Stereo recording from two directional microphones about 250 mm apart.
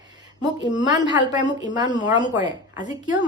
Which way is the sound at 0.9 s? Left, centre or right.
Centre.